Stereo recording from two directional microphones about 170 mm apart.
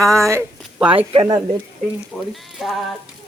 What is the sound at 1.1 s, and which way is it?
Speech, 35° right (ahead or behind).